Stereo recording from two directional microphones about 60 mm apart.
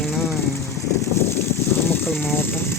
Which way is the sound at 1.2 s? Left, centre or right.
Left.